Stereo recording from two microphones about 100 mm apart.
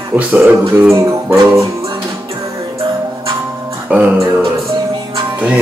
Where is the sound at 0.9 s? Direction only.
30° right (ahead or behind).